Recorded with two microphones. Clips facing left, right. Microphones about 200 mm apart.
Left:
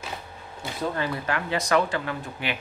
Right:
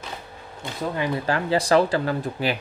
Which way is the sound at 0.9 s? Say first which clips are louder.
Right 4 dB; 15° right (ahead or behind).